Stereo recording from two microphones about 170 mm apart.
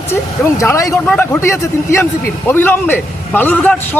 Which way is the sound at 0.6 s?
20° left (ahead or behind).